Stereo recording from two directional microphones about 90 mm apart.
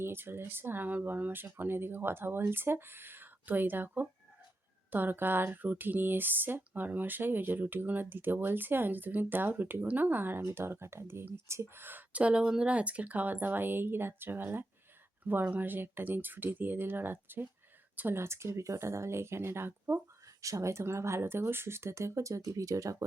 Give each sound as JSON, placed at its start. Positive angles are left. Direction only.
{"t": 0.0, "sound": "speech", "side_deg": -25}
{"t": 20.4, "sound": "speech", "side_deg": -35}